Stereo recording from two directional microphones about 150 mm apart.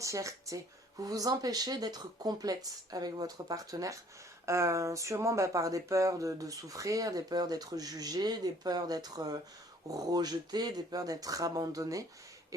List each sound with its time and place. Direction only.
0.0 s speech: 20° right (ahead or behind)